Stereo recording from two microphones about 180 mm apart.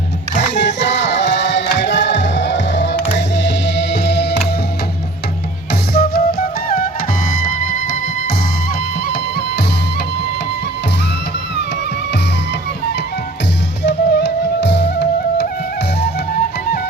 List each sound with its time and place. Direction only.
0.5 s music: 80° left
5.9 s music: 60° left (ahead or behind)
13.8 s music: 75° left (ahead or behind)